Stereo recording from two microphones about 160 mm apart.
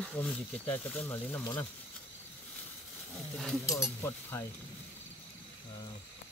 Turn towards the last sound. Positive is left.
turn(degrees=15)  # may be behind; listen again after turning